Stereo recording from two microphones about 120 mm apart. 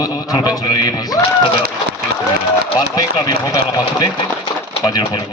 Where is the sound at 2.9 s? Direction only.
35° left (ahead or behind).